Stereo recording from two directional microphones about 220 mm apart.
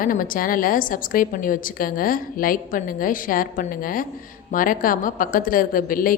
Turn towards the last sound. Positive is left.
turn(degrees=40)  # may be behind; listen again after turning